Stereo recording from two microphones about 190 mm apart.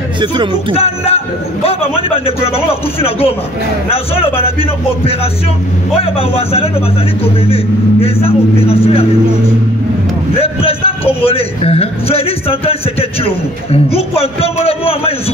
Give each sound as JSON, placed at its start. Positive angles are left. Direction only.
{"t": 0.2, "sound": "speech", "side_deg": -25}
{"t": 0.7, "sound": "a man's voice", "side_deg": 30}
{"t": 10.3, "sound": "a man's voice", "side_deg": 30}